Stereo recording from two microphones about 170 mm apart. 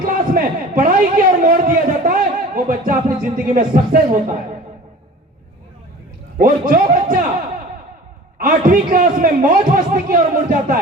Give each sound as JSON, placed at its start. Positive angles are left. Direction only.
{"t": 0.0, "sound": "a sound", "side_deg": -55}
{"t": 3.2, "sound": "a man's voice", "side_deg": -55}
{"t": 6.3, "sound": "speech", "side_deg": -55}
{"t": 8.4, "sound": "a man's voice", "side_deg": -55}